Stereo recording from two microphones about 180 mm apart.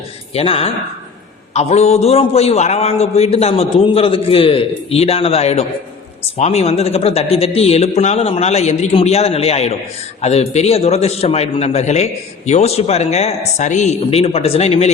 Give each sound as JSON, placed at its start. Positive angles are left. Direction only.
{"t": 0.3, "sound": "a man's voice", "side_deg": 30}